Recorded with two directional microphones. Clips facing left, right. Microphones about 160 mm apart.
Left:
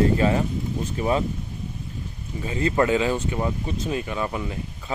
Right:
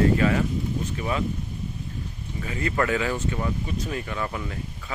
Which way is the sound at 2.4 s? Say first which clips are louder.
Left 4 dB; 25° left (ahead or behind).